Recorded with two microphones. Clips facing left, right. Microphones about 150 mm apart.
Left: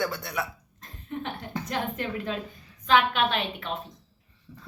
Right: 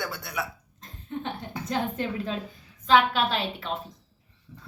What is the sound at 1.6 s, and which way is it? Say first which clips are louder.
A woman's voice: right 3 dB; 30° right (ahead or behind).